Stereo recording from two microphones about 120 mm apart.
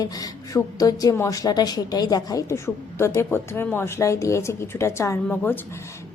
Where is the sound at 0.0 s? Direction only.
30° left (ahead or behind).